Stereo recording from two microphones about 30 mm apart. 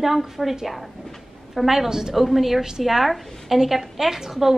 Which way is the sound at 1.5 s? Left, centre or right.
Centre.